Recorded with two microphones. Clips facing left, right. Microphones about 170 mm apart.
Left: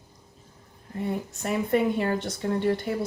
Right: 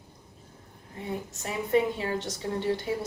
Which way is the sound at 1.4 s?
55° left (ahead or behind).